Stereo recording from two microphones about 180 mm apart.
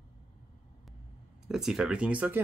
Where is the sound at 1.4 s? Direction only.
Centre (ahead or behind).